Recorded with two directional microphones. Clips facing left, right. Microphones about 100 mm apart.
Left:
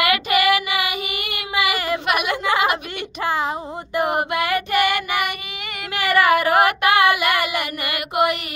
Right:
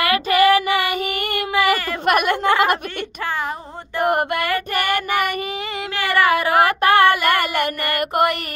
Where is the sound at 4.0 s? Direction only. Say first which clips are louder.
Right 2 dB; 50° right (ahead or behind).